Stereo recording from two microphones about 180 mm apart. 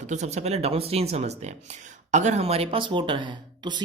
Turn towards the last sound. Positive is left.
turn(degrees=-25)  # may be behind; listen again after turning